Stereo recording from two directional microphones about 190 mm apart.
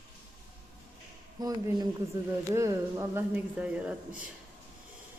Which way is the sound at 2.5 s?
15° right (ahead or behind).